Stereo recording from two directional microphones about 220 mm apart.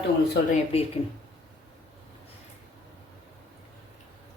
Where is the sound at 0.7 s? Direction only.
25° left (ahead or behind).